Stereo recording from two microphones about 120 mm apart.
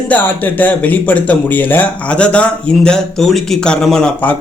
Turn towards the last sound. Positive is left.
turn(degrees=5)  # may be behind; listen again after turning